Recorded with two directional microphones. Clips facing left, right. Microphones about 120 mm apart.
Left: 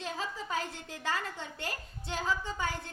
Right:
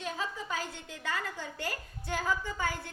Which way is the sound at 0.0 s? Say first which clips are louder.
Right 1 dB; 30° left (ahead or behind).